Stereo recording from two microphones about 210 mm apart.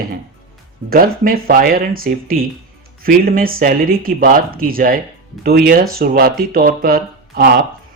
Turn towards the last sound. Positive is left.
turn(degrees=-45)  # may be behind; listen again after turning